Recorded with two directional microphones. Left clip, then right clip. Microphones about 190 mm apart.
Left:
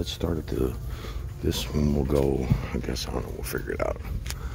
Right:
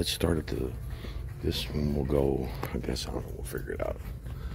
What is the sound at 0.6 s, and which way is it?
Speech, 20° left (ahead or behind).